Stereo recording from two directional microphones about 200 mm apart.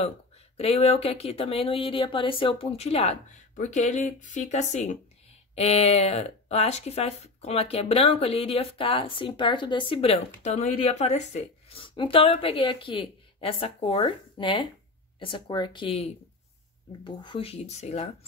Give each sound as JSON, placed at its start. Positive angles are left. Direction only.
{"t": 0.6, "sound": "speech", "side_deg": 30}